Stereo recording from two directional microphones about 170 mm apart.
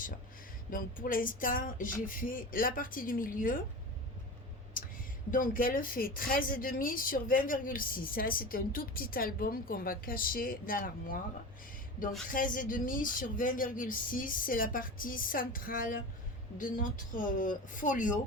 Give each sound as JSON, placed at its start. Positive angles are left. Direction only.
{"t": 0.7, "sound": "speech", "side_deg": 55}
{"t": 4.8, "sound": "a sound", "side_deg": 55}
{"t": 5.3, "sound": "a woman's voice", "side_deg": 55}
{"t": 12.3, "sound": "speech", "side_deg": 55}